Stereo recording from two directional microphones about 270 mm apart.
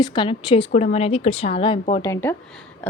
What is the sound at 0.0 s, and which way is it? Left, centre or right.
A woman's voice, centre.